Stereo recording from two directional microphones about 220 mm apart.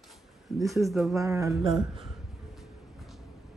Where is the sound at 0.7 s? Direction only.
Centre (ahead or behind).